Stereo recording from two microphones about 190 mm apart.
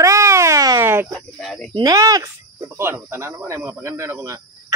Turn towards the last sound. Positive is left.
turn(degrees=-15)  # may be behind; listen again after turning